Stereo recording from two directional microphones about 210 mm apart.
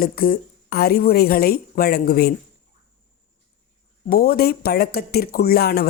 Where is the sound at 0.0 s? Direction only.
45° left (ahead or behind).